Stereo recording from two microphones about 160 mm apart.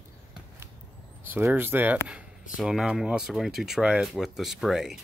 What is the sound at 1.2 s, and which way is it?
Speech, 15° right (ahead or behind).